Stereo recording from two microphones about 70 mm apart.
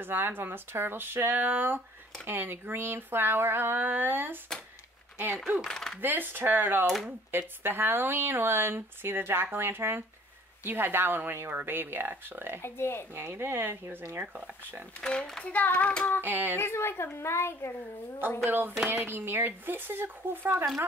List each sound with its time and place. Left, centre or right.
0.0 s speech: right
5.6 s a child's voice: centre
5.9 s speech: right
12.6 s a woman's voice: left
13.1 s speech: right
15.0 s a child's voice: centre
15.4 s speech: left
16.2 s speech: right
16.5 s a woman's voice: left
18.9 s speech: right